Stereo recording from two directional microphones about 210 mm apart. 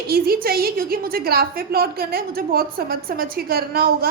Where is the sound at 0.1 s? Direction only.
45° right (ahead or behind).